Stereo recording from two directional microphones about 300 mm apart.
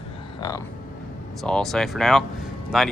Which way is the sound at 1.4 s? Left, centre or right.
Centre.